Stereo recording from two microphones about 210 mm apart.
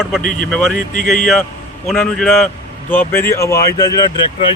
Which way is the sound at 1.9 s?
5° left (ahead or behind).